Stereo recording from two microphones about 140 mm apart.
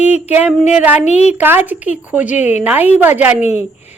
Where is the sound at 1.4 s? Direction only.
15° right (ahead or behind).